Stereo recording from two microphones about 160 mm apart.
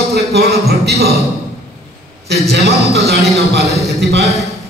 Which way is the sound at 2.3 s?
85° right.